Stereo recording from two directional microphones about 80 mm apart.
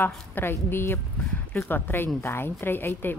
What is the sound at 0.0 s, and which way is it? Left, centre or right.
A woman's voice, left.